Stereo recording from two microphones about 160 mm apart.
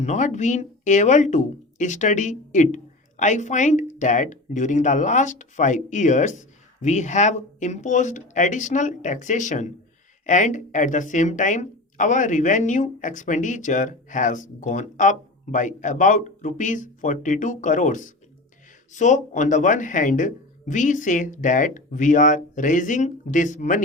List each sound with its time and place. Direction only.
0.0 s speech: 50° left (ahead or behind)